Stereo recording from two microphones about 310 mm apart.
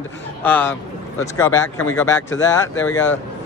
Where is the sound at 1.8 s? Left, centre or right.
Centre.